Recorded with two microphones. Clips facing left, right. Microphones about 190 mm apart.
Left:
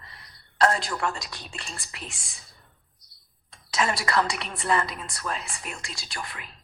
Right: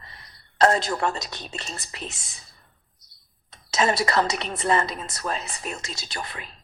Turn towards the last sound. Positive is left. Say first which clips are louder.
# right 3 dB
turn(degrees=-25)  # may be behind; listen again after turning